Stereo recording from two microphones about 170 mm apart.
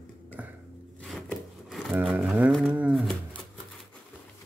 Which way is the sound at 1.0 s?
Centre (ahead or behind).